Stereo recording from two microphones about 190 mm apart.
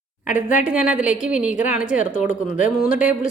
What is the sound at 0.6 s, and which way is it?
A woman's voice, 5° right (ahead or behind).